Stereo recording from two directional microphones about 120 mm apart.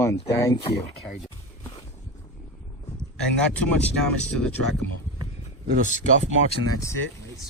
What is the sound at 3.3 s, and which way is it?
Speech, 10° left (ahead or behind).